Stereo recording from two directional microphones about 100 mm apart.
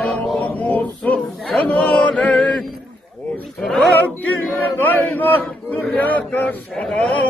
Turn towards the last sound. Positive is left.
turn(degrees=5)  # may be behind; listen again after turning